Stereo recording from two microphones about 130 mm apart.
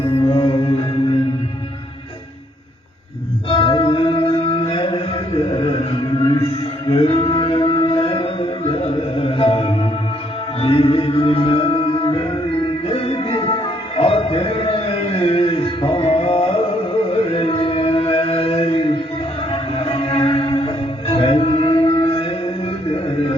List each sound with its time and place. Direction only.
0.0 s music: 45° left (ahead or behind)
3.5 s music: 45° left (ahead or behind)
6.8 s music: 45° left (ahead or behind)